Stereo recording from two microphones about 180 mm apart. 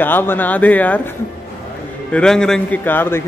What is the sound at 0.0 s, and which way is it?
A man's voice, 10° left (ahead or behind).